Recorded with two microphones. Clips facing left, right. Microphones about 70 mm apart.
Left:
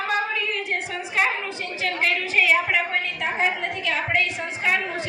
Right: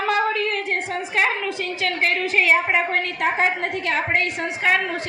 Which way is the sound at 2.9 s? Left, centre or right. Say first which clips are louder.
Right 4 dB; right.